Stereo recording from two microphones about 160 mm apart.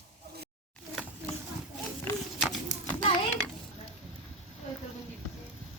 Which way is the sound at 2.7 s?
50° left (ahead or behind).